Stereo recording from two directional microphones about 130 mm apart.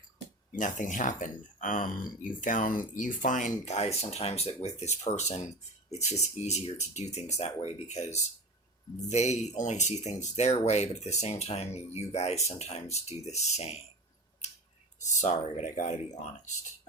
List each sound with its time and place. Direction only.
0.5 s speech: 80° left; by 13.8 s 55° left (ahead or behind)
15.0 s speech: 65° left (ahead or behind)